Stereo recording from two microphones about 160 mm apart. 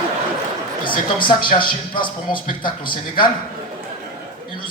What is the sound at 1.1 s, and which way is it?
Speech, 30° left (ahead or behind).